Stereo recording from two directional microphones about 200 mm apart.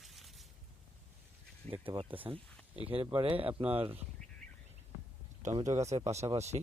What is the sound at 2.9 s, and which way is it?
Speech, 25° right (ahead or behind).